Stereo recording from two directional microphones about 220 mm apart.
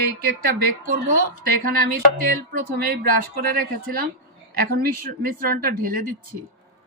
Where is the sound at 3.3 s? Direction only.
40° right (ahead or behind).